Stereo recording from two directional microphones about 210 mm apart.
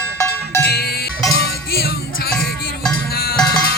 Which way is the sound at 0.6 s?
50° left (ahead or behind).